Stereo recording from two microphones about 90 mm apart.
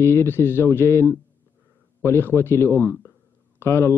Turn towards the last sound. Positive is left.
turn(degrees=30)  # may be behind; listen again after turning